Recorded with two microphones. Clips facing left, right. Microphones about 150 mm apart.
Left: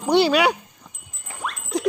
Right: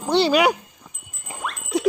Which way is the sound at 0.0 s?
10° left (ahead or behind).